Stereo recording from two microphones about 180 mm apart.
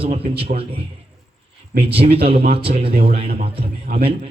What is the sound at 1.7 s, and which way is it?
A man's voice, 30° right (ahead or behind).